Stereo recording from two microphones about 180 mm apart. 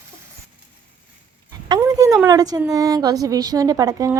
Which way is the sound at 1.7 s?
20° right (ahead or behind).